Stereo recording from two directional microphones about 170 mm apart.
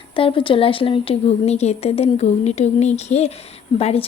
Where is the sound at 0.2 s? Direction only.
30° left (ahead or behind).